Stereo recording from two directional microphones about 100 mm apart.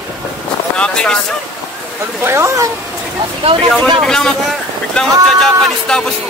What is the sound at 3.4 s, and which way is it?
Speech, 70° right (ahead or behind).